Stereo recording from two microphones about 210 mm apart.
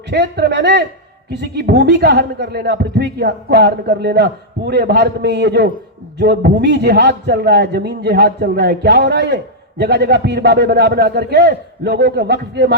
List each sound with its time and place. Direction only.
0.1 s a man's voice: 50° right (ahead or behind)